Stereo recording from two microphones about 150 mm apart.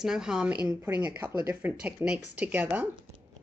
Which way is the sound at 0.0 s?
5° right (ahead or behind).